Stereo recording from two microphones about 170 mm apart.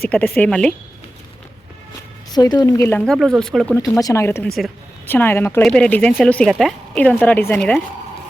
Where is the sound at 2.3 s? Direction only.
25° left (ahead or behind).